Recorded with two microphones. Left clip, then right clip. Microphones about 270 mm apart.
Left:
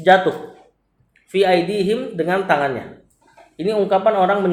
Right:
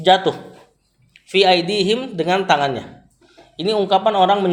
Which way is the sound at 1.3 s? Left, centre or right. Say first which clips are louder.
Right 2 dB; right.